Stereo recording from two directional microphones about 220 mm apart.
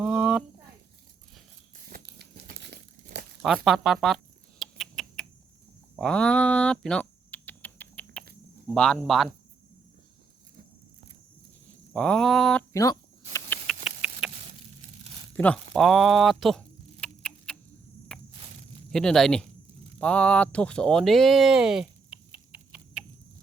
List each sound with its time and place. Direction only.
0.0 s a sound: 5° right (ahead or behind)
1.9 s crumpling: 45° right (ahead or behind)
3.4 s speech: centre (ahead or behind)
4.6 s rodents: centre (ahead or behind)
6.0 s typing: 5° left (ahead or behind)
8.7 s speech: 5° left (ahead or behind)
11.9 s speech: centre (ahead or behind)
12.7 s a sound: 15° left (ahead or behind)
13.7 s engine: 5° right (ahead or behind)
15.4 s a sound: 5° left (ahead or behind)
18.9 s speech: centre (ahead or behind)
20.0 s a sound: 5° left (ahead or behind)